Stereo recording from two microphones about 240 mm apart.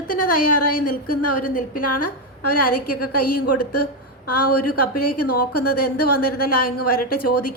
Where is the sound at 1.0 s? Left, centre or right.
Left.